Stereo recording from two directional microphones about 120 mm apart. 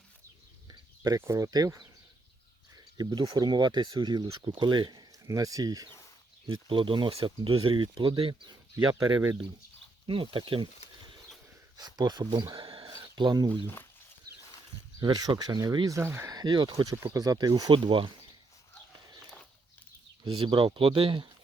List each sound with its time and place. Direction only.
0.7 s a sound: 35° right (ahead or behind)
1.2 s speech: 25° right (ahead or behind)
3.0 s speech: 35° right (ahead or behind)
6.7 s speech: 45° right (ahead or behind)
10.1 s speech: 50° right (ahead or behind)
11.8 s speech: 35° right (ahead or behind)
12.6 s a sound: 50° right (ahead or behind)
13.1 s speech: 35° right (ahead or behind)
15.0 s speech: 35° right (ahead or behind)
16.0 s speech: 20° right (ahead or behind)
16.3 s speech: 35° right (ahead or behind)
16.9 s speech: 30° right (ahead or behind); by 18.1 s 45° right (ahead or behind)
20.2 s speech: 40° right (ahead or behind)